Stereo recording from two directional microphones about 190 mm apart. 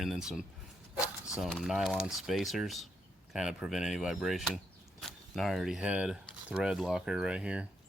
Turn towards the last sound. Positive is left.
turn(degrees=-5)  # may be behind; listen again after turning